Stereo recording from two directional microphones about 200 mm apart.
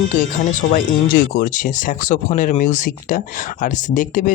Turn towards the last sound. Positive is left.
turn(degrees=40)  # may be behind; listen again after turning